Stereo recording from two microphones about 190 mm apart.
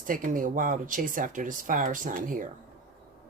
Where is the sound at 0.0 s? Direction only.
45° right (ahead or behind).